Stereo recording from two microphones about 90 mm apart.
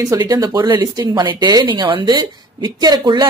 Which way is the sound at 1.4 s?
55° right (ahead or behind).